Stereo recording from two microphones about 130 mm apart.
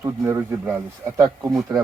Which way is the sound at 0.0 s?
20° right (ahead or behind).